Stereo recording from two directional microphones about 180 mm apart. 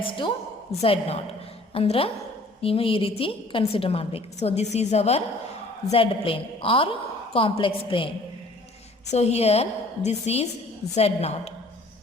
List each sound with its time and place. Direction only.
0.0 s a woman's voice: 30° left (ahead or behind)